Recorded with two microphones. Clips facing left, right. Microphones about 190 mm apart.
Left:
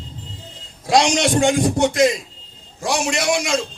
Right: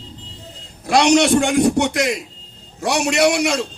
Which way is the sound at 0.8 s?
65° right (ahead or behind).